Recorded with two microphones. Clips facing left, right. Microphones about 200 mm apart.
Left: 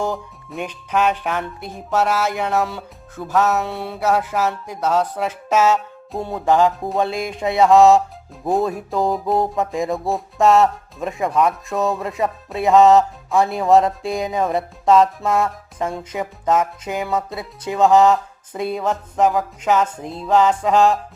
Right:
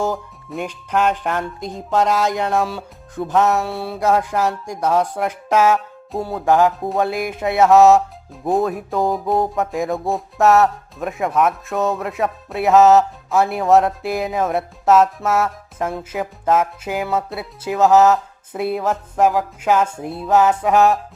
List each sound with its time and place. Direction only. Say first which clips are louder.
0.0 s music: right 2 dB; 5° right (ahead or behind)
0.9 s music: even; 10° left (ahead or behind)
1.3 s a sound: right 2 dB; 15° right (ahead or behind)
6.1 s music: right 1 dB; centre (ahead or behind)